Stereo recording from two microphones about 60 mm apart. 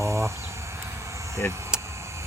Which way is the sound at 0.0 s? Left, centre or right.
Right.